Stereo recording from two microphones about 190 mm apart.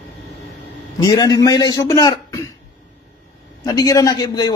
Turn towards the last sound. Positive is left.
turn(degrees=20)  # may be behind; listen again after turning